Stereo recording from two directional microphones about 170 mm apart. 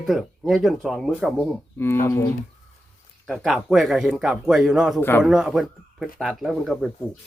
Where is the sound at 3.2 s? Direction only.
Centre (ahead or behind).